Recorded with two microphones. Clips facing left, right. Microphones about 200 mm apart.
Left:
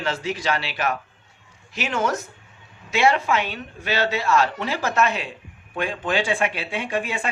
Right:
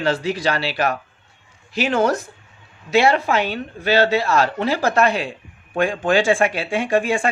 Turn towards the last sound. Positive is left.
turn(degrees=-45)  # may be behind; listen again after turning